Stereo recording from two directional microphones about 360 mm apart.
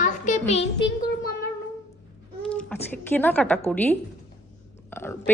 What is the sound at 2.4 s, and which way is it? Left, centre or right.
A woman's voice, centre.